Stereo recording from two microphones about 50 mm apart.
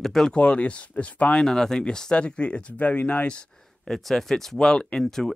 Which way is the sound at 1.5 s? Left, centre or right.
Centre.